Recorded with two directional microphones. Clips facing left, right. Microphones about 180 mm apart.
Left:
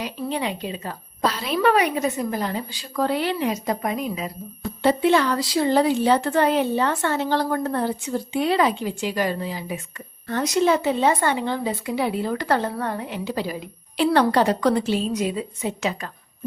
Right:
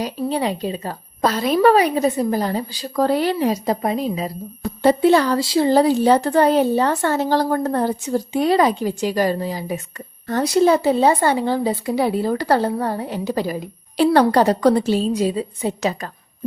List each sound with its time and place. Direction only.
0.0 s speech: 35° right (ahead or behind)